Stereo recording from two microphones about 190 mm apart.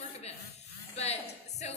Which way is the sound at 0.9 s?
35° left (ahead or behind).